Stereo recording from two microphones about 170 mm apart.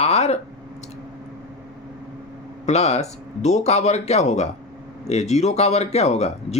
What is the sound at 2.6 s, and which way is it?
Speech, 40° left (ahead or behind).